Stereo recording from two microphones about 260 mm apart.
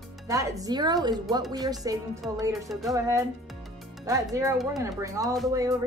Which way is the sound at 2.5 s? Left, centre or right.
Centre.